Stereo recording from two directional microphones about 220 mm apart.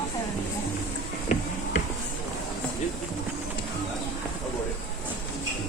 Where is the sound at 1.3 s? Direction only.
30° left (ahead or behind).